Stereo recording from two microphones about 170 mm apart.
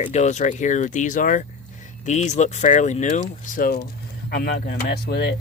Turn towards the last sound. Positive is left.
turn(degrees=70)  # may be behind; listen again after turning